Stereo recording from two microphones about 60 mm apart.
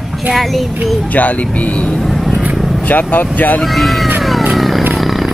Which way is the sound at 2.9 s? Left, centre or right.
Left.